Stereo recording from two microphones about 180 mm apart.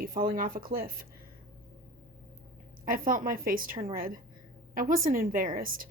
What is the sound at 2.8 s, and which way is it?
A woman's voice, 50° right (ahead or behind).